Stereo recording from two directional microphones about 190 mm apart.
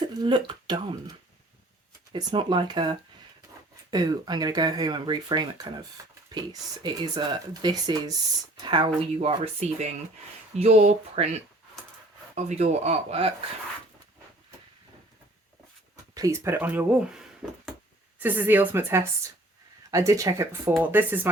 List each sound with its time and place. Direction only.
0.0 s speech: 25° right (ahead or behind)
2.1 s speech: 25° right (ahead or behind)
12.3 s speech: 35° right (ahead or behind)
16.1 s speech: 15° right (ahead or behind)